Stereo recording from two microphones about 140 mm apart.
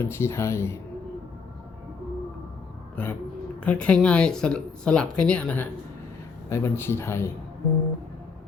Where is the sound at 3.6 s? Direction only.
5° left (ahead or behind).